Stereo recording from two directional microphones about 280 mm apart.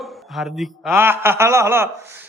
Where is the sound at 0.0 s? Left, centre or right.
Centre.